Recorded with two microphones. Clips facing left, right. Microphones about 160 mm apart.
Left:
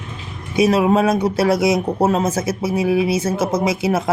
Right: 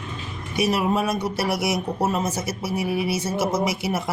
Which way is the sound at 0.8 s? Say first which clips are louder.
Left 7 dB; 90° left.